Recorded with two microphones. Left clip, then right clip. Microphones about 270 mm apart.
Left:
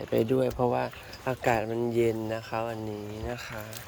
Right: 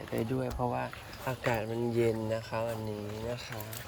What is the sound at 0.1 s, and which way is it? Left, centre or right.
Speech, left.